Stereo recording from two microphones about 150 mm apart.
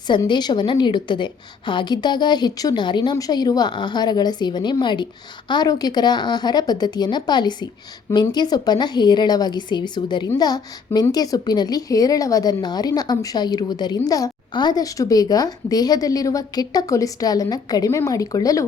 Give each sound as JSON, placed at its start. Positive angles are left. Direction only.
{"t": 0.3, "sound": "a woman's voice", "side_deg": 30}